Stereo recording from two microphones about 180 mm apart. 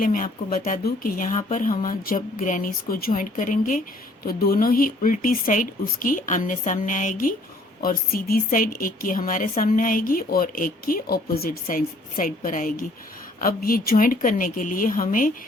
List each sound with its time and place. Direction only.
0.0 s a woman's voice: 50° left (ahead or behind)